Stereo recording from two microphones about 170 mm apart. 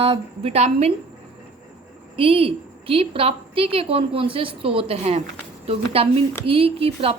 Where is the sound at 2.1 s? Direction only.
35° right (ahead or behind).